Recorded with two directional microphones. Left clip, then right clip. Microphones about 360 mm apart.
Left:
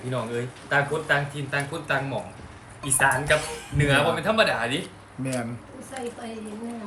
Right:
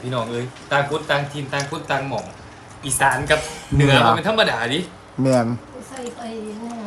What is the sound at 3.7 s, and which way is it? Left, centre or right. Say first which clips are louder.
Speech: right 7 dB; centre.